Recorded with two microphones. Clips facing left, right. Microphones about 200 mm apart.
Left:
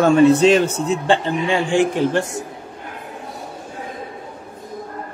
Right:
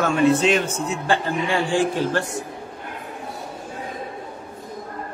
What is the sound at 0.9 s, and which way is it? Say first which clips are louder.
A man's voice: left 3 dB; 25° left (ahead or behind).